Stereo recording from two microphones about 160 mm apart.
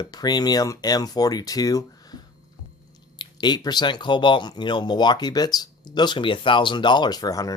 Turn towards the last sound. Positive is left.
turn(degrees=20)  # may be behind; listen again after turning